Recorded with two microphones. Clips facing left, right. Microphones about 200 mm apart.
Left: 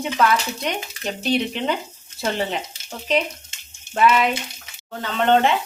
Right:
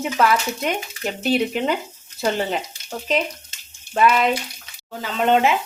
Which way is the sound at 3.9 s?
Centre (ahead or behind).